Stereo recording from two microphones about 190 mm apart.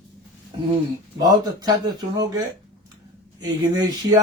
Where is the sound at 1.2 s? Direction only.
20° right (ahead or behind).